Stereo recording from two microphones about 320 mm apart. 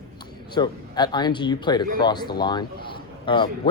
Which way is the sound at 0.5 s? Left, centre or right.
Centre.